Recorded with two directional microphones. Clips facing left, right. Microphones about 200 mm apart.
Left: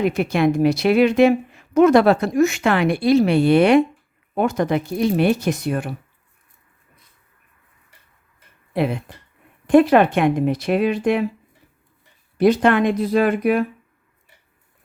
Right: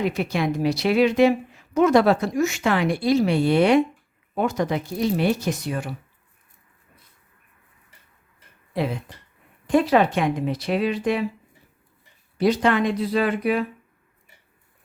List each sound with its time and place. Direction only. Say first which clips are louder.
0.0 s a woman's voice: left 5 dB; 55° left (ahead or behind)
8.7 s a woman's voice: left 4 dB; 60° left (ahead or behind)
12.4 s speech: left 4 dB; 55° left (ahead or behind)